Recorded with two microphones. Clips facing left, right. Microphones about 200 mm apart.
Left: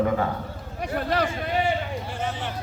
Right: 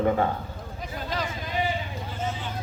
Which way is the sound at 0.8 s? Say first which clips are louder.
Left 7 dB; 70° left (ahead or behind).